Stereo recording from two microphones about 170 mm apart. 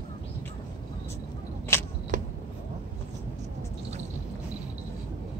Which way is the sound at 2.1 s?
50° right (ahead or behind).